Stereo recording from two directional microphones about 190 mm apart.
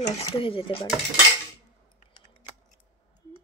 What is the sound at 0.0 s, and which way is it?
Speech, 30° left (ahead or behind).